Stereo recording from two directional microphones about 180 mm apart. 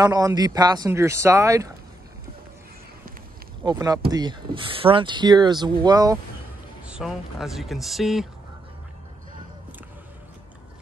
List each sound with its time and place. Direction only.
0.0 s speech: 20° right (ahead or behind)
3.7 s speech: 20° right (ahead or behind)
6.9 s speech: 5° right (ahead or behind)